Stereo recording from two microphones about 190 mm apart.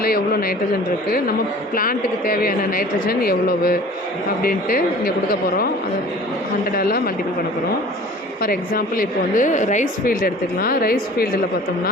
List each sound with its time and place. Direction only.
0.0 s speech: 50° left (ahead or behind)
1.7 s a woman's voice: 50° left (ahead or behind)
6.7 s a woman's voice: 50° left (ahead or behind)
8.4 s a woman's voice: 50° left (ahead or behind)